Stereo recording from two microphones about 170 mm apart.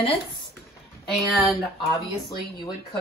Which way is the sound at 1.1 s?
Centre (ahead or behind).